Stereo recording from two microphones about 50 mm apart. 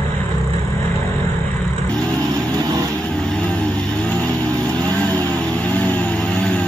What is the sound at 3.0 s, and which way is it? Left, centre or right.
Vehicle, centre.